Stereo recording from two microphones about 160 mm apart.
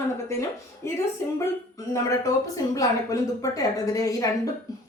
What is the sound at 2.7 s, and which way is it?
A woman's voice, 20° left (ahead or behind).